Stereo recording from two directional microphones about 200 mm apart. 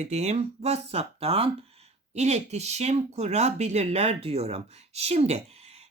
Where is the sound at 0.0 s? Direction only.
35° right (ahead or behind).